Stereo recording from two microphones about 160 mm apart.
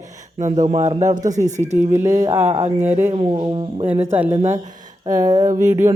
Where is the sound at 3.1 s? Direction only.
35° right (ahead or behind).